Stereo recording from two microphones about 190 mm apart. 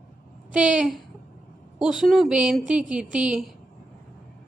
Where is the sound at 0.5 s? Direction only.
5° right (ahead or behind).